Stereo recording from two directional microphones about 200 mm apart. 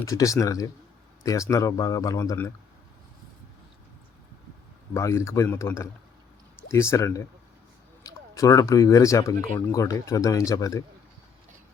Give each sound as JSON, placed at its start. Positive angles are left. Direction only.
{"t": 0.0, "sound": "speech", "side_deg": 15}
{"t": 4.9, "sound": "speech", "side_deg": 15}